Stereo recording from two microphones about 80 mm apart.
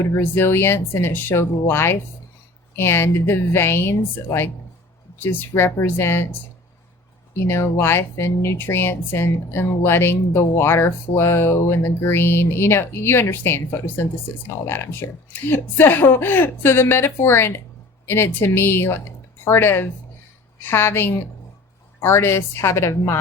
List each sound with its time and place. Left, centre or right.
0.2 s speech: left
7.4 s speech: left